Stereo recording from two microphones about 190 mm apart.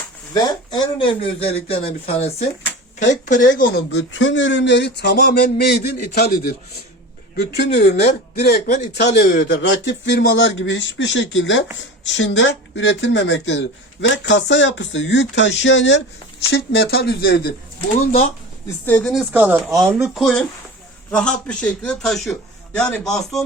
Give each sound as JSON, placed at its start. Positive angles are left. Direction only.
{"t": 0.3, "sound": "speech", "side_deg": 20}
{"t": 3.9, "sound": "speech", "side_deg": 80}
{"t": 16.5, "sound": "a man's voice", "side_deg": 60}
{"t": 18.9, "sound": "a man's voice", "side_deg": 5}